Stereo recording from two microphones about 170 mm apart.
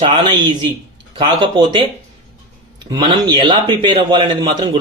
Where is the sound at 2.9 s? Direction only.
25° right (ahead or behind).